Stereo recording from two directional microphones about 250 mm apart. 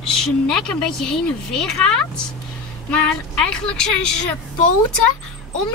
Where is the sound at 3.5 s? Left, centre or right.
Centre.